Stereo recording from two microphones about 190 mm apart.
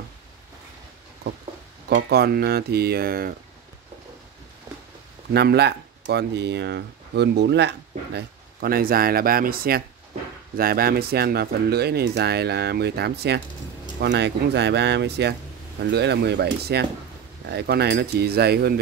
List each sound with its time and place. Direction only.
1.9 s speech: 60° right (ahead or behind)
5.3 s speech: 60° right (ahead or behind)